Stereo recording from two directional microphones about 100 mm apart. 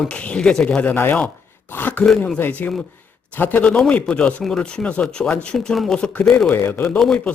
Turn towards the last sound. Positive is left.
turn(degrees=10)  # may be behind; listen again after turning